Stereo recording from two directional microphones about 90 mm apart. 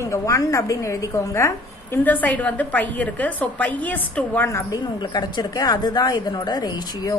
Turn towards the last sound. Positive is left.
turn(degrees=45)  # may be behind; listen again after turning